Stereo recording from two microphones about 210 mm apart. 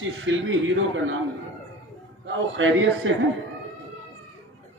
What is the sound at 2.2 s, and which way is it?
Speech, 65° right (ahead or behind).